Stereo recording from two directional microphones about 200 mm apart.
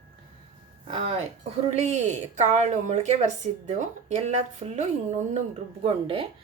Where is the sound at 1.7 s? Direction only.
35° right (ahead or behind).